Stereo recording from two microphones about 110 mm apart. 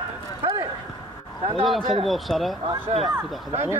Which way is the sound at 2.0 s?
Centre (ahead or behind).